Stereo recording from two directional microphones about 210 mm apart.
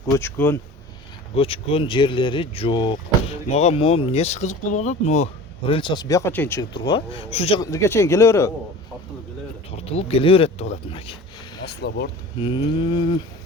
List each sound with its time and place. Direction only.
0.1 s a man's voice: 10° left (ahead or behind)
1.4 s speech: 25° left (ahead or behind)
7.6 s a man's voice: 15° left (ahead or behind)
9.8 s speech: 30° left (ahead or behind)
11.6 s speech: 50° left (ahead or behind)
12.4 s speech: 25° left (ahead or behind)